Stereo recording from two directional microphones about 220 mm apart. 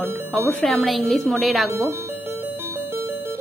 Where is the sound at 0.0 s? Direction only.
10° right (ahead or behind).